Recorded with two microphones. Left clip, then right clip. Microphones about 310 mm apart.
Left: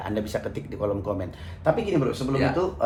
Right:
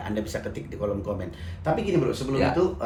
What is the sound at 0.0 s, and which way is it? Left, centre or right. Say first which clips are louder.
Speech: left 2 dB; centre.